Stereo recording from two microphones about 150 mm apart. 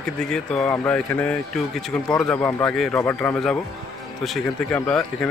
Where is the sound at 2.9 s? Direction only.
15° left (ahead or behind).